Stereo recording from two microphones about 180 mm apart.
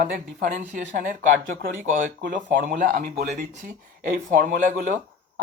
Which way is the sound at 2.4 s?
50° right (ahead or behind).